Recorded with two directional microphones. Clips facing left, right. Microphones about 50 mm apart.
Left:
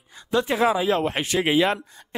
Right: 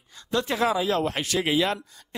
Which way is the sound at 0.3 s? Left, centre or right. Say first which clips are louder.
Left 3 dB; centre.